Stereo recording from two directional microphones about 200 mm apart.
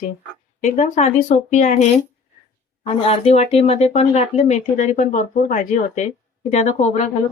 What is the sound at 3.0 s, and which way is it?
Speech, 30° left (ahead or behind).